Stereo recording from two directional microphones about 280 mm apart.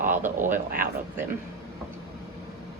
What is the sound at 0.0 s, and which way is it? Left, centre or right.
Speech, right.